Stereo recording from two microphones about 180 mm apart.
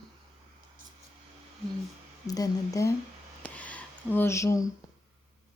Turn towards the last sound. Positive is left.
turn(degrees=20)  # may be behind; listen again after turning